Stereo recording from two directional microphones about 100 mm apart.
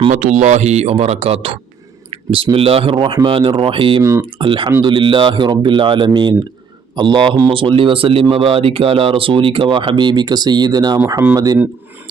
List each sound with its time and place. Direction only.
0.6 s speech: 90° right
2.0 s speech: 65° right (ahead or behind)
4.0 s speech: 30° right (ahead or behind)
4.4 s speech: 55° right (ahead or behind); by 11.6 s 40° right (ahead or behind)